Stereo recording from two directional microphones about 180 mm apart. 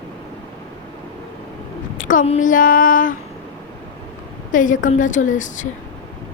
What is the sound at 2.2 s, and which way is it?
Speech, 45° left (ahead or behind).